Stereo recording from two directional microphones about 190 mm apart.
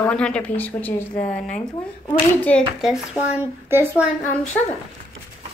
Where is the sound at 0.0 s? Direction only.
5° left (ahead or behind).